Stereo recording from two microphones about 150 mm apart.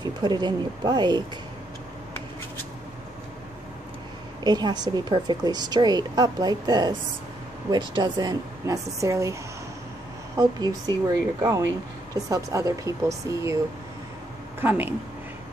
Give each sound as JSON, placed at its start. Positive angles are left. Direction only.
{"t": 0.0, "sound": "a woman's voice", "side_deg": -30}
{"t": 4.4, "sound": "a woman's voice", "side_deg": -30}
{"t": 14.6, "sound": "speech", "side_deg": -10}